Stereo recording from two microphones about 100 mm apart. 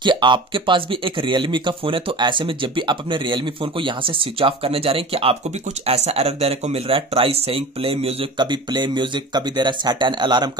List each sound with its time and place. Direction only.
0.0 s speech: 50° right (ahead or behind); by 5.4 s 75° right (ahead or behind)
5.9 s speech: 90° right; by 8.3 s 70° right (ahead or behind)
8.4 s speech: 50° right (ahead or behind)